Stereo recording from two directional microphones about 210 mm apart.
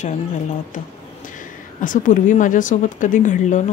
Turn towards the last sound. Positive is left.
turn(degrees=35)  # may be behind; listen again after turning